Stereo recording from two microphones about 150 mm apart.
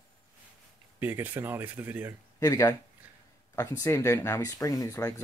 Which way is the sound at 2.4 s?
20° left (ahead or behind).